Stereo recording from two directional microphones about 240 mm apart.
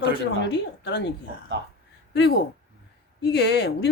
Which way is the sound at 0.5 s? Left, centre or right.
Left.